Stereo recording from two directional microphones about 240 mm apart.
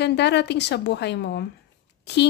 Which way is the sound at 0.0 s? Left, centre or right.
Left.